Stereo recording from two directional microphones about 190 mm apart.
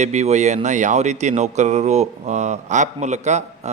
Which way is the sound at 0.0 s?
35° right (ahead or behind).